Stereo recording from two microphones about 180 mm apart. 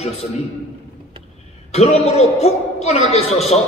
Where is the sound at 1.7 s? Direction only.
35° left (ahead or behind).